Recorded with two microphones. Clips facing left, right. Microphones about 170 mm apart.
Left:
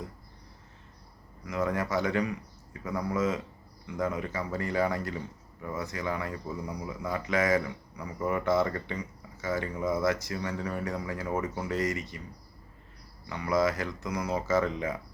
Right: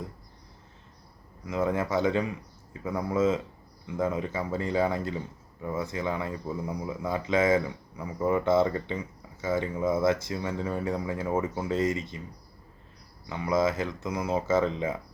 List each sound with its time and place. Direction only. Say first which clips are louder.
1.5 s speech: right 2 dB; 25° right (ahead or behind)
13.2 s speech: right 1 dB; 20° right (ahead or behind)